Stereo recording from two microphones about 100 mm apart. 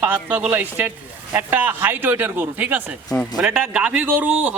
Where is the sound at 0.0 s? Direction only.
20° right (ahead or behind).